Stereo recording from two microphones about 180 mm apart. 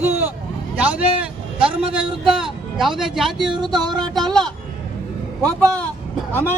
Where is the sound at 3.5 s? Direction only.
25° right (ahead or behind).